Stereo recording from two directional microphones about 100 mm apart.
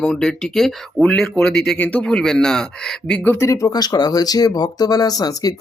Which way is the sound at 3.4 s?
30° left (ahead or behind).